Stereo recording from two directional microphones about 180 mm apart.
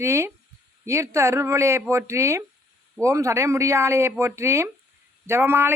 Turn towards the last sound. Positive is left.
turn(degrees=-15)  # may be behind; listen again after turning